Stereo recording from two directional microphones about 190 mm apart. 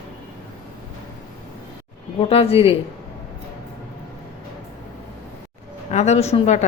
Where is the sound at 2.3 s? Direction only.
30° left (ahead or behind).